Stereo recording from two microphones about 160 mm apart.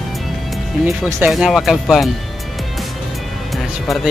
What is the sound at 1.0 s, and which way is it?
Speech, 5° right (ahead or behind).